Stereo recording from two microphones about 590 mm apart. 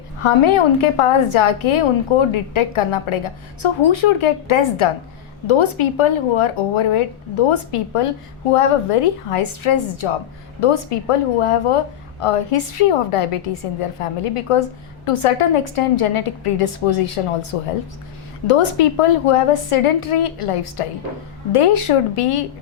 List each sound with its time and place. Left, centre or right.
0.2 s a woman's voice: left